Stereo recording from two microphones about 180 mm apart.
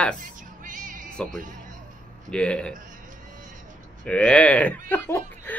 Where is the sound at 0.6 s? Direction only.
45° right (ahead or behind).